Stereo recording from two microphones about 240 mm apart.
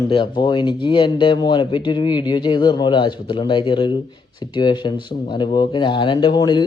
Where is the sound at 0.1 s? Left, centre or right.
Centre.